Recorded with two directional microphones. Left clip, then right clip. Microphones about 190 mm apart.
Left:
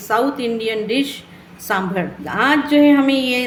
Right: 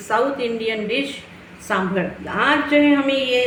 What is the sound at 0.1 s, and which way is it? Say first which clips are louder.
A woman's voice: left 1 dB; 70° left (ahead or behind).